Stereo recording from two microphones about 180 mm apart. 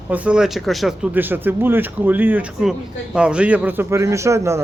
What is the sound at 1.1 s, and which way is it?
Speech, 10° right (ahead or behind).